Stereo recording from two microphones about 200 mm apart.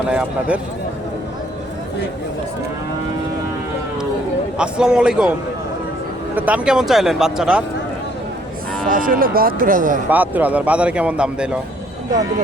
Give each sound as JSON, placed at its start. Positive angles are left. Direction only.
{"t": 0.1, "sound": "speech", "side_deg": -5}
{"t": 4.5, "sound": "speech", "side_deg": -5}
{"t": 6.3, "sound": "speech", "side_deg": -5}
{"t": 8.9, "sound": "speech", "side_deg": -45}
{"t": 10.1, "sound": "speech", "side_deg": -10}